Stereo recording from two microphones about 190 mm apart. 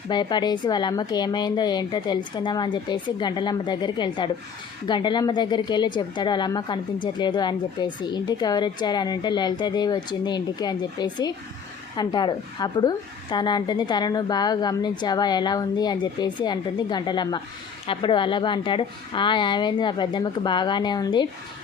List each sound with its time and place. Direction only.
0.1 s speech: 25° left (ahead or behind)